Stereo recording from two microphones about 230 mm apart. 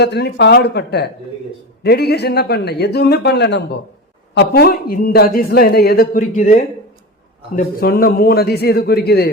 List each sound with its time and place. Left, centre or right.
0.0 s a man's voice: left